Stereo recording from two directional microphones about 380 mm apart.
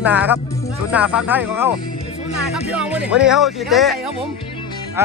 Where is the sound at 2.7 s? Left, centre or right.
Centre.